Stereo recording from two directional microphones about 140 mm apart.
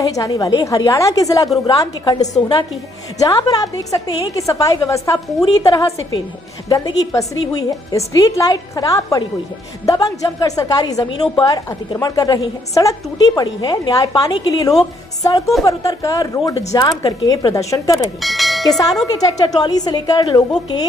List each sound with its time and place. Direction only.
0.0 s a woman's voice: 25° left (ahead or behind)
18.2 s bell: centre (ahead or behind)
19.1 s a woman's voice: 25° left (ahead or behind)